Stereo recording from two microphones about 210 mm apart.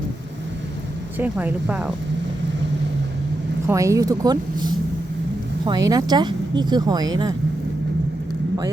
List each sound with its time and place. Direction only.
1.2 s speech: 10° right (ahead or behind)
3.7 s speech: 15° right (ahead or behind)